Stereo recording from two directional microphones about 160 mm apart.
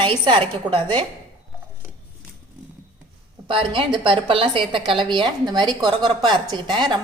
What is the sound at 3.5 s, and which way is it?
A woman's voice, 30° right (ahead or behind).